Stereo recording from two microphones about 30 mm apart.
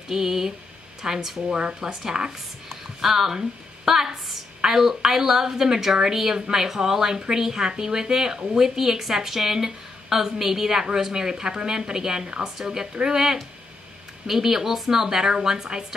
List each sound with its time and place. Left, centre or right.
0.1 s a woman's voice: centre
1.5 s speech: right
2.7 s a woman's voice: centre